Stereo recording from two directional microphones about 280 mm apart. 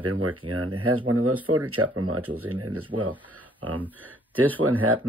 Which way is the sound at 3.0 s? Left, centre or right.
Centre.